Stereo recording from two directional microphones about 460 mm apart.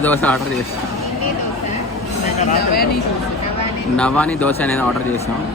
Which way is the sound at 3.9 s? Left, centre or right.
Centre.